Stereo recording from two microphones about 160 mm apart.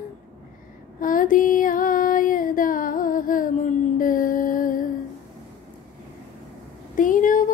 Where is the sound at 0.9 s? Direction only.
60° left (ahead or behind).